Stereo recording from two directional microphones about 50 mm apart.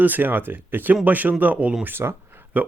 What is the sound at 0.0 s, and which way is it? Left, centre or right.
Speech, right.